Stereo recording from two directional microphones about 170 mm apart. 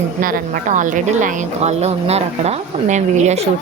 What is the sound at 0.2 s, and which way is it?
A woman's voice, 55° right (ahead or behind).